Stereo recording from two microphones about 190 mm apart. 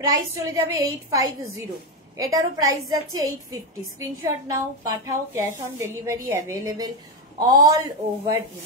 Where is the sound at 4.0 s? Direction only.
15° right (ahead or behind).